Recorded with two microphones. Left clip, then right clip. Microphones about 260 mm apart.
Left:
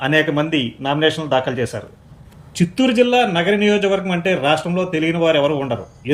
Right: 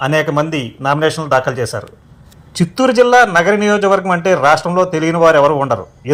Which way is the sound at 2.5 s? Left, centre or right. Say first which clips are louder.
Right 5 dB; centre.